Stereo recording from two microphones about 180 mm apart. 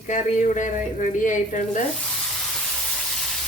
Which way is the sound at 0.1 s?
45° left (ahead or behind).